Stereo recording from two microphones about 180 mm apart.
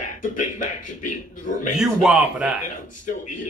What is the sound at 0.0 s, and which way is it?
Speech, 45° left (ahead or behind).